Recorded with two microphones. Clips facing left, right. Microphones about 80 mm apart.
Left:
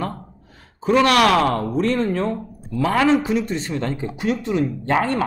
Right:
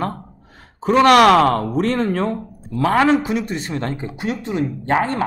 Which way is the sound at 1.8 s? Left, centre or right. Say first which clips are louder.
Left 2 dB; right.